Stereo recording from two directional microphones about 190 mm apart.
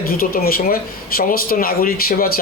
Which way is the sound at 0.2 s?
50° left (ahead or behind).